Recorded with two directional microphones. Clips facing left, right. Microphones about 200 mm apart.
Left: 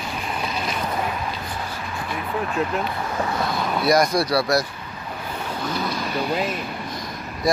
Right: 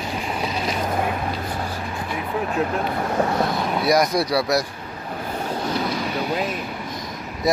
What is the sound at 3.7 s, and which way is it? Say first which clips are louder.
Speech: left 1 dB; 15° right (ahead or behind).